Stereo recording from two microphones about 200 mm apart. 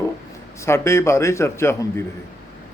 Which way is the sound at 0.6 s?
15° left (ahead or behind).